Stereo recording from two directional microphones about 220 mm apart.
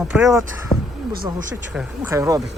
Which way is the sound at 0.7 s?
20° left (ahead or behind).